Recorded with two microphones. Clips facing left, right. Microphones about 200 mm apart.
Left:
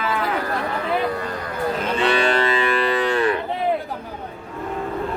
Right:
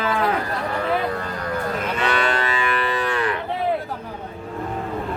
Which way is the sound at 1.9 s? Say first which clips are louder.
Left 4 dB; 30° left (ahead or behind).